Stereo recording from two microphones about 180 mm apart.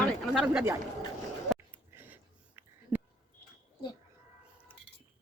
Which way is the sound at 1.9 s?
10° right (ahead or behind).